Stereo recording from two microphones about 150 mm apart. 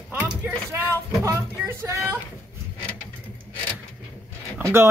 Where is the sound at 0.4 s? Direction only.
15° right (ahead or behind).